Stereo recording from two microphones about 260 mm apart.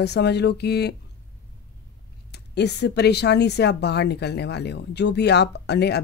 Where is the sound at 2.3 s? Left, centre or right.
Left.